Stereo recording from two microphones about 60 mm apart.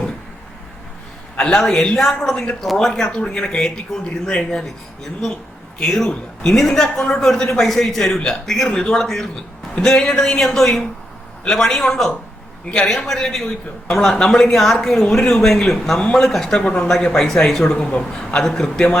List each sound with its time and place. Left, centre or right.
1.4 s a man's voice: centre
5.8 s a man's voice: centre
16.0 s a man's voice: centre
16.2 s a man's voice: centre